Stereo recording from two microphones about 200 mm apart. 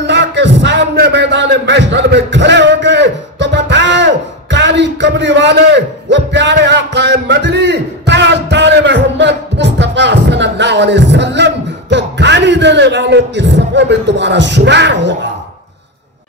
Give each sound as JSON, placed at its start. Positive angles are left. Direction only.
{"t": 0.0, "sound": "music", "side_deg": -60}